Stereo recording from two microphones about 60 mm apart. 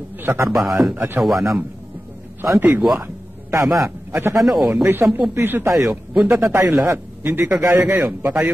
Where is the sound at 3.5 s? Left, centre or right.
Right.